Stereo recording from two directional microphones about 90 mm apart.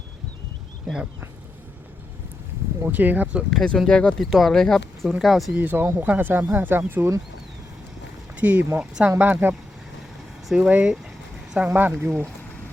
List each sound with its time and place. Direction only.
2.8 s speech: 20° right (ahead or behind)
3.5 s speech: 5° left (ahead or behind)
5.5 s speech: 20° right (ahead or behind)
8.4 s speech: 15° right (ahead or behind)